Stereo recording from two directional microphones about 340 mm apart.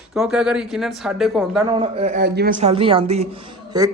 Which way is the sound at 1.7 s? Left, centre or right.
Centre.